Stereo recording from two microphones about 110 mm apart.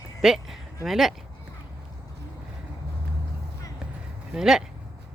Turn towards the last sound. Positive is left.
turn(degrees=-5)  # may be behind; listen again after turning